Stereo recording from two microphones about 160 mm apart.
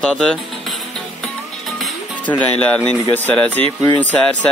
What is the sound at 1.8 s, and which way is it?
Music, 5° left (ahead or behind).